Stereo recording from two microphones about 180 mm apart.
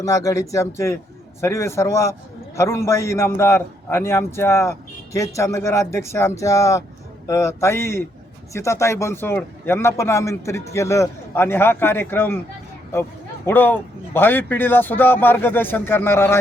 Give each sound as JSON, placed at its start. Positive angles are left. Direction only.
{"t": 0.0, "sound": "a man's voice", "side_deg": 20}